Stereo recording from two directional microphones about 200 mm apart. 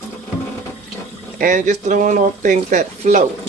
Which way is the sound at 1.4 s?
40° right (ahead or behind).